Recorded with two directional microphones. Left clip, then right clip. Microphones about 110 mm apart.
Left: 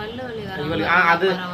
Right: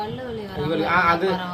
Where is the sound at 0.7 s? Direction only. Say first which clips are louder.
Left 2 dB; 5° left (ahead or behind).